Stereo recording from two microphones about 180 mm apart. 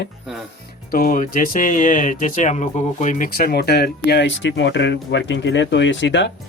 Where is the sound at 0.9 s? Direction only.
50° left (ahead or behind).